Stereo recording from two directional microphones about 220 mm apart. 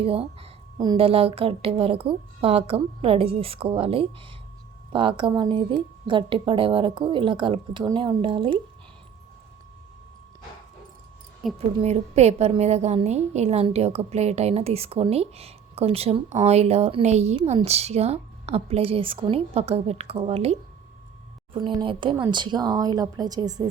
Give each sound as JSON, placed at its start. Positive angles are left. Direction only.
{"t": 0.0, "sound": "a woman's voice", "side_deg": -25}
{"t": 11.4, "sound": "speech", "side_deg": 0}
{"t": 11.8, "sound": "a woman's voice", "side_deg": -30}